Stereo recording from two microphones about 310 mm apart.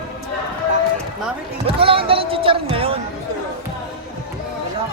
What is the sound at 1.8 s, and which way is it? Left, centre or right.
Music, centre.